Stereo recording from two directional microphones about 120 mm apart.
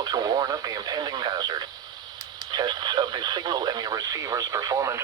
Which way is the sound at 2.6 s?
35° right (ahead or behind).